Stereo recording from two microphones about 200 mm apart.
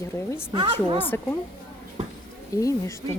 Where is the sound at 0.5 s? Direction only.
25° right (ahead or behind).